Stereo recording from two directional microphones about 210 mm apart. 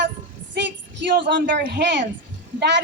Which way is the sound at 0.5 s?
55° right (ahead or behind).